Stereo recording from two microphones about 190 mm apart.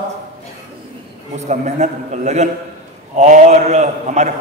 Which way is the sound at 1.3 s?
40° right (ahead or behind).